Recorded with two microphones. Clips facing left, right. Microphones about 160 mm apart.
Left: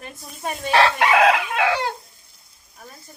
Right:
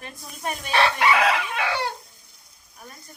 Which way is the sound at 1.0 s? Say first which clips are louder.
Left 4 dB; 90° left.